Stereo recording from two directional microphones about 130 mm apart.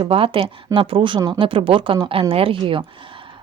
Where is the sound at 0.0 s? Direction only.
45° right (ahead or behind).